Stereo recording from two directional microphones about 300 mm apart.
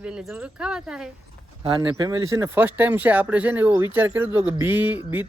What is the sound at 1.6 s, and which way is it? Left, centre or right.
Speech, centre.